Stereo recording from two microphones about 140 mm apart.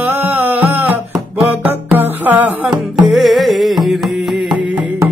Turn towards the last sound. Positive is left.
turn(degrees=-5)  # may be behind; listen again after turning